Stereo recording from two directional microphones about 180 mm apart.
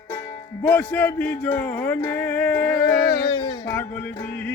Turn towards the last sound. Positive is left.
turn(degrees=25)  # may be behind; listen again after turning